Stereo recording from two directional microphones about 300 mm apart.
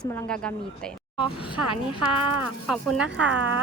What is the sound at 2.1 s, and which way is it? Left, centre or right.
Speech, right.